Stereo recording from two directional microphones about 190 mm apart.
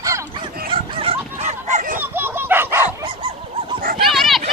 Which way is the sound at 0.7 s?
30° right (ahead or behind).